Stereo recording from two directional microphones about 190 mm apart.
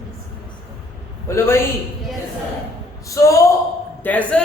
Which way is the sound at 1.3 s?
15° left (ahead or behind).